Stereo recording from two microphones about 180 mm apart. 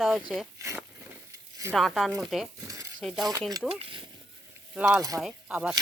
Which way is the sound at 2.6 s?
20° right (ahead or behind).